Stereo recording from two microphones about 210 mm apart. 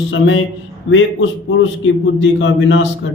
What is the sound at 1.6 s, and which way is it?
A man's voice, 60° left (ahead or behind).